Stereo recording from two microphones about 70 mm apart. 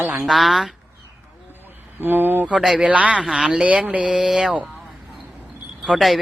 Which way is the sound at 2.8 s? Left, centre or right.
Centre.